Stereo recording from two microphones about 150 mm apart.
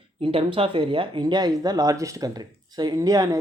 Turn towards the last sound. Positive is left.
turn(degrees=-20)  # may be behind; listen again after turning